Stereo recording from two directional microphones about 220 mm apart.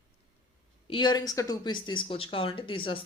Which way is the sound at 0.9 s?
20° left (ahead or behind).